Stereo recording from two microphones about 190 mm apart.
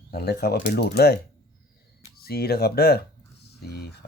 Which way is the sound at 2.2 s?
55° left (ahead or behind).